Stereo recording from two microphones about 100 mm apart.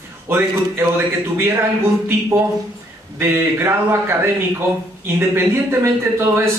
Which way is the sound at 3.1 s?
25° right (ahead or behind).